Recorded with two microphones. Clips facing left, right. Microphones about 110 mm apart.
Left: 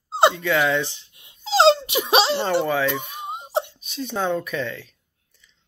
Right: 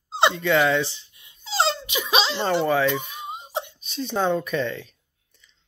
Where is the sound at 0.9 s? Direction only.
60° left (ahead or behind).